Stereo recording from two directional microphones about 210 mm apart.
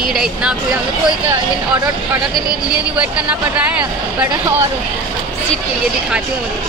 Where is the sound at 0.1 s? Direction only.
5° right (ahead or behind).